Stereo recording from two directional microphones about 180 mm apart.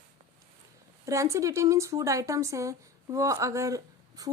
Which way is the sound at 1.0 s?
15° right (ahead or behind).